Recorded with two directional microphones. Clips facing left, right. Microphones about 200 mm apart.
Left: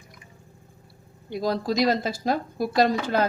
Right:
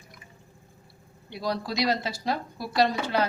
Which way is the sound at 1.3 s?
45° left (ahead or behind).